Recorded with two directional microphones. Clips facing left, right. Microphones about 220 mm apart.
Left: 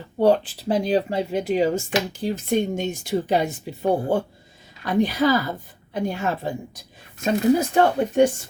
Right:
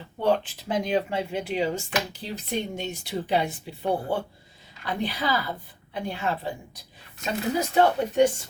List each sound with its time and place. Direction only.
0.2 s speech: 35° left (ahead or behind)